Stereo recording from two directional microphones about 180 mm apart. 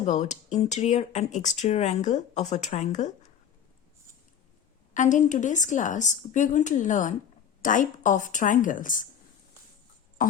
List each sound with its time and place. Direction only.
0.0 s speech: 40° left (ahead or behind)
4.9 s a woman's voice: 45° left (ahead or behind)
10.2 s music: 50° left (ahead or behind)